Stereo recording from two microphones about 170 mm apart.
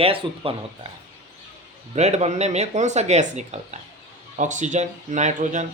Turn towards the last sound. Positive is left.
turn(degrees=-45)  # may be behind; listen again after turning